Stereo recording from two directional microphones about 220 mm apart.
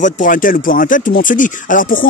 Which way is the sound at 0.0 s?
35° left (ahead or behind).